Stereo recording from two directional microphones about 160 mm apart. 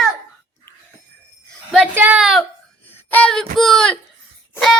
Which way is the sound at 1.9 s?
10° right (ahead or behind).